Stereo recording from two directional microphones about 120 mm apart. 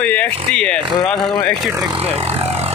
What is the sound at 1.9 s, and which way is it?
Vehicle, 60° right (ahead or behind).